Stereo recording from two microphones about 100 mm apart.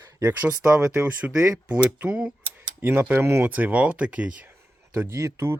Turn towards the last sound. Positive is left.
turn(degrees=-25)  # may be behind; listen again after turning